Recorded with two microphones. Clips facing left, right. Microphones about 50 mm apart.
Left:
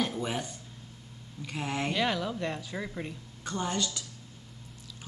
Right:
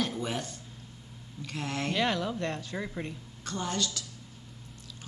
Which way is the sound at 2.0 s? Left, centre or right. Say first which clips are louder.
Right 3 dB; centre.